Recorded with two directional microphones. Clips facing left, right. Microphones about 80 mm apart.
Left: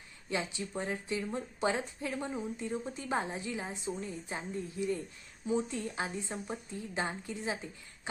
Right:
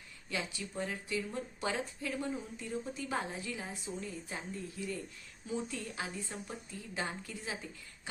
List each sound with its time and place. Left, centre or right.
0.3 s a woman's voice: left